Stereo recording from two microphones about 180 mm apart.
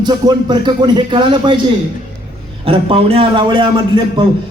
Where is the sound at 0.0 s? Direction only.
25° right (ahead or behind).